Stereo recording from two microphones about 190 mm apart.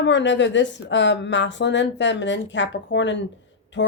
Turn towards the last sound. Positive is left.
turn(degrees=70)  # may be behind; listen again after turning